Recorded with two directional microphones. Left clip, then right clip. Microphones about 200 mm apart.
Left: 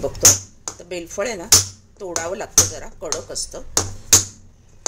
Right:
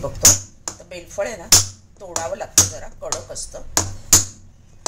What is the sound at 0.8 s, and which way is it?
Speech, 55° left (ahead or behind).